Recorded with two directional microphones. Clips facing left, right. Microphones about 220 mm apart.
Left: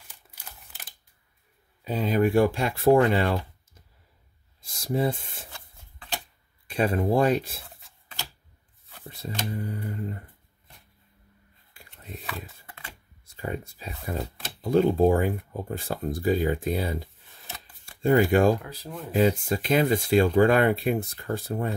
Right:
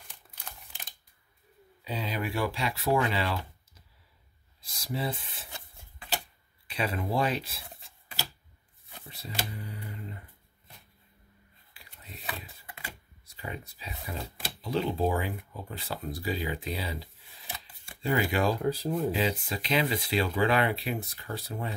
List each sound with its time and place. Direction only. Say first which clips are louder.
0.3 s a sound: right 1 dB; 5° left (ahead or behind)
1.9 s speech: left 10 dB; 50° left (ahead or behind)
4.6 s speech: left 7 dB; 50° left (ahead or behind)
6.7 s speech: left 7 dB; 45° left (ahead or behind)
7.7 s a sound: right 2 dB; 10° right (ahead or behind)
9.5 s speech: left 9 dB; 50° left (ahead or behind)
11.7 s a sound: left 8 dB; 50° left (ahead or behind)
13.4 s speech: left 7 dB; 50° left (ahead or behind)
18.6 s speech: right 10 dB; 30° right (ahead or behind)
19.1 s speech: left 7 dB; 50° left (ahead or behind)